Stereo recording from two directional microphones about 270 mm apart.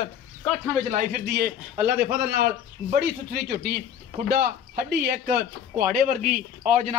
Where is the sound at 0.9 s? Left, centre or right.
Right.